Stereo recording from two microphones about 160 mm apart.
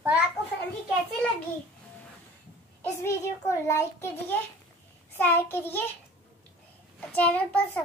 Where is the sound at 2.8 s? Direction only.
15° left (ahead or behind).